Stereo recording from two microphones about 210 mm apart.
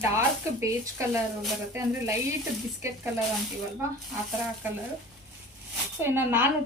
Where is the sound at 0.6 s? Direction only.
15° right (ahead or behind).